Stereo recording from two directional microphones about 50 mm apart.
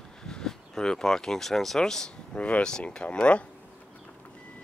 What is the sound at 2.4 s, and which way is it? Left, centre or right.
Speech, left.